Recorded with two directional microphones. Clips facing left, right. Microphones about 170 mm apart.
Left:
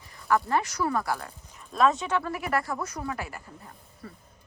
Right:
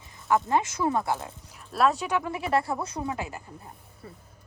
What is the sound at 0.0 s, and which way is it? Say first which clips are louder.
Speech: right 1 dB; 20° right (ahead or behind).